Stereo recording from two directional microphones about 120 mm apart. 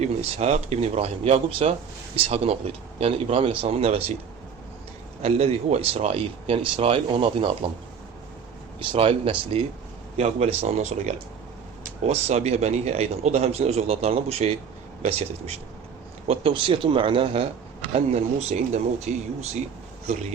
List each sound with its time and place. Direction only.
0.0 s speech: 65° right (ahead or behind)
5.2 s speech: 60° right (ahead or behind)
8.8 s speech: 45° right (ahead or behind)
18.1 s speech: 60° right (ahead or behind)
19.1 s speech: 85° right